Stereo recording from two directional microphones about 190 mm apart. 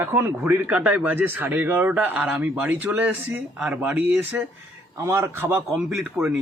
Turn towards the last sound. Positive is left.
turn(degrees=-5)  # may be behind; listen again after turning